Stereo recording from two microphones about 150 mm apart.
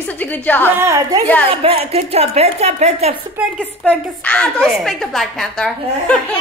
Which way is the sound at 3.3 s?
5° right (ahead or behind).